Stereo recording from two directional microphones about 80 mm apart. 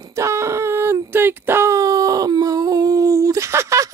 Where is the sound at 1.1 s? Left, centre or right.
Right.